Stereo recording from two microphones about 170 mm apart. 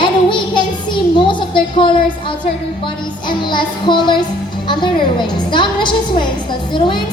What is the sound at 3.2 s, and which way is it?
Speech, 30° left (ahead or behind).